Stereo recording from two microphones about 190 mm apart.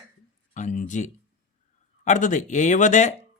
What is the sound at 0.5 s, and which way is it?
Speech, 40° left (ahead or behind).